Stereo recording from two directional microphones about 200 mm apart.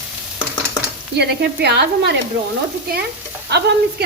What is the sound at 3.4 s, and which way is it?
Speech, 55° right (ahead or behind).